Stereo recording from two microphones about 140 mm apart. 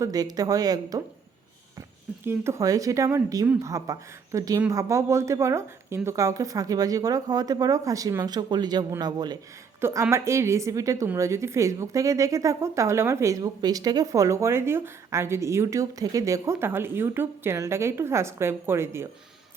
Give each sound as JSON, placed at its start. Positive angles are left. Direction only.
{"t": 0.0, "sound": "a woman's voice", "side_deg": -25}
{"t": 2.2, "sound": "a woman's voice", "side_deg": -20}